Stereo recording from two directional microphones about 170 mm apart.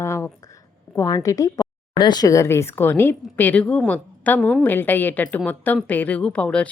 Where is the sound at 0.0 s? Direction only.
15° left (ahead or behind).